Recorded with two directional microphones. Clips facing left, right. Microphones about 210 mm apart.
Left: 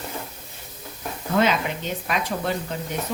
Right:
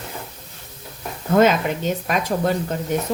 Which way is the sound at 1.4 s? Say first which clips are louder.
Right 5 dB; 45° right (ahead or behind).